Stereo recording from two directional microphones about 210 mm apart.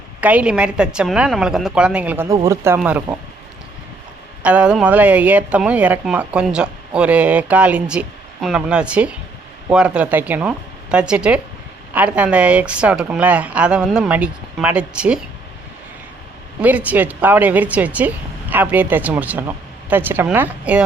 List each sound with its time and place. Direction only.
0.2 s speech: 5° right (ahead or behind)
4.4 s speech: 5° right (ahead or behind)
16.6 s speech: 5° right (ahead or behind)